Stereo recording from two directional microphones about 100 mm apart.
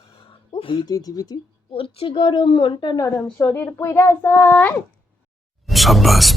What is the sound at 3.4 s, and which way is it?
Speech, 25° left (ahead or behind).